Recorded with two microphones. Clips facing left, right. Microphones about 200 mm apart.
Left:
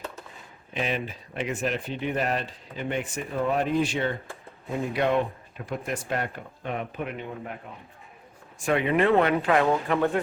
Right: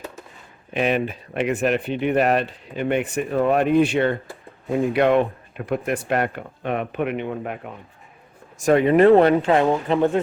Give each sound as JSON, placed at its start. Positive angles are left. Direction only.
{"t": 0.7, "sound": "speech", "side_deg": -60}
{"t": 8.5, "sound": "speech", "side_deg": -40}
{"t": 9.4, "sound": "speech", "side_deg": -25}